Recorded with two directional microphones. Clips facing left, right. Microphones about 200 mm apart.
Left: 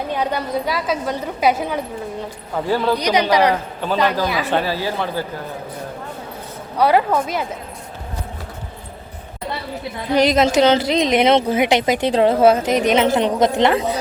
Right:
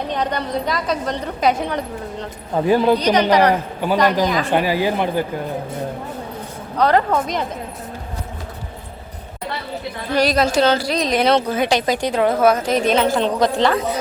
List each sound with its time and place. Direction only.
0.1 s a woman's voice: 5° left (ahead or behind)
2.6 s speech: 15° right (ahead or behind)
3.0 s a woman's voice: 10° left (ahead or behind)
3.5 s speech: 10° right (ahead or behind)
4.3 s a woman's voice: 10° left (ahead or behind)
4.5 s speech: 15° right (ahead or behind)
6.7 s a woman's voice: 10° left (ahead or behind)
10.1 s a woman's voice: 20° left (ahead or behind)